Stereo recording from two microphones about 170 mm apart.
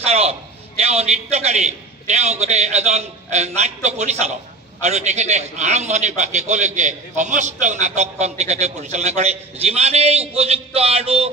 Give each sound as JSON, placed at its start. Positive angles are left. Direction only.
{"t": 0.0, "sound": "a man's voice", "side_deg": -35}